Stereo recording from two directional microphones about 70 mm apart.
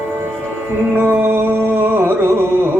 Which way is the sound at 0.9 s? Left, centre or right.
Right.